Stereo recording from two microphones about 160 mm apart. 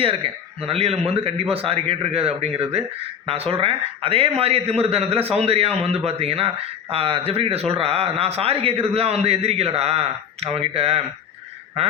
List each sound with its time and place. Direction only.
0.0 s a man's voice: 35° right (ahead or behind)